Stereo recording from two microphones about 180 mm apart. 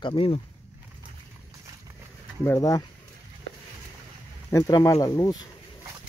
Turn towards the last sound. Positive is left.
turn(degrees=20)  # may be behind; listen again after turning